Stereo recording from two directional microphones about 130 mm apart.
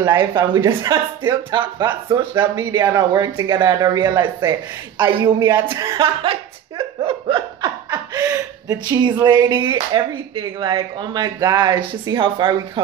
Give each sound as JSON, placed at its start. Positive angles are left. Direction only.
{"t": 0.0, "sound": "speech", "side_deg": -30}
{"t": 2.7, "sound": "speech", "side_deg": -25}
{"t": 7.1, "sound": "laughter", "side_deg": -40}
{"t": 7.9, "sound": "speech", "side_deg": -25}